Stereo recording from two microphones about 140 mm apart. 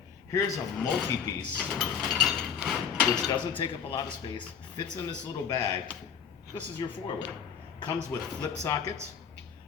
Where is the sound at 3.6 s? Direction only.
35° left (ahead or behind).